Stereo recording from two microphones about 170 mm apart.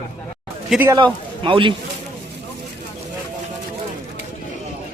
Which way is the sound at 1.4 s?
30° right (ahead or behind).